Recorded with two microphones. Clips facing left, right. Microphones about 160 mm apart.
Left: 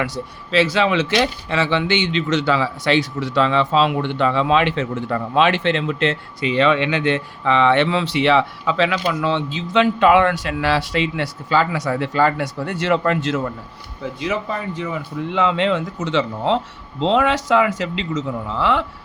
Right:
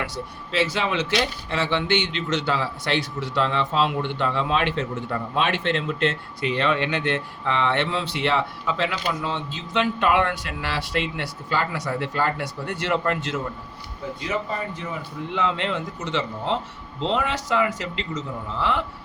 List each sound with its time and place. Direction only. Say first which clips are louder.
0.0 s speech: left 6 dB; 90° left
15.4 s speech: left 7 dB; 90° left